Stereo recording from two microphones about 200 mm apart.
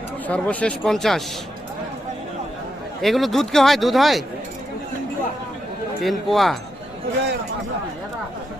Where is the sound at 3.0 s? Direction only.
Centre (ahead or behind).